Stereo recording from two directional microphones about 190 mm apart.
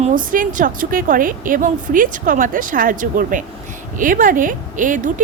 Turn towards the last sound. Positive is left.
turn(degrees=-45)  # may be behind; listen again after turning